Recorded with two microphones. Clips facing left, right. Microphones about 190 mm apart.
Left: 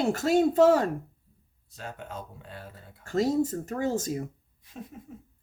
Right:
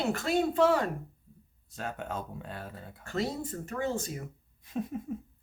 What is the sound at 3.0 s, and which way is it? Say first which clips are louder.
Speech: left 8 dB; 45° left (ahead or behind).